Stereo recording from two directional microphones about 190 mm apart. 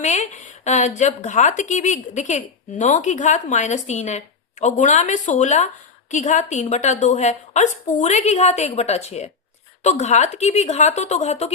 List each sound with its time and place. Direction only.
0.0 s a woman's voice: 40° left (ahead or behind)